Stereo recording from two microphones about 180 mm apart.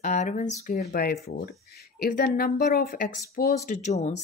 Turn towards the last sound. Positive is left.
turn(degrees=40)  # may be behind; listen again after turning